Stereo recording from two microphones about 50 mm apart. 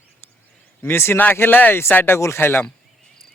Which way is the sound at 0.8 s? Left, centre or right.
Left.